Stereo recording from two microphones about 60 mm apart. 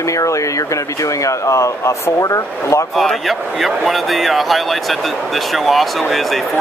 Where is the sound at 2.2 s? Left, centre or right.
Left.